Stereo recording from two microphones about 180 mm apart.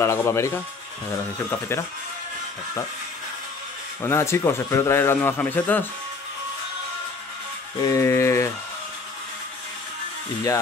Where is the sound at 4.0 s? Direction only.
15° left (ahead or behind).